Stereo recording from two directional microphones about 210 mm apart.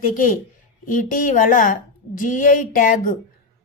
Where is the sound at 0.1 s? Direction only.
40° left (ahead or behind).